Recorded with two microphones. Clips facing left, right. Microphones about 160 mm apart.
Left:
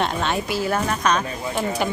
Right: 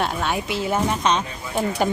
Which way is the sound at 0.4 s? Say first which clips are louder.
Even; 20° right (ahead or behind).